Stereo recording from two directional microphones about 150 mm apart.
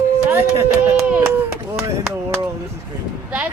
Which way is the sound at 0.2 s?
15° right (ahead or behind).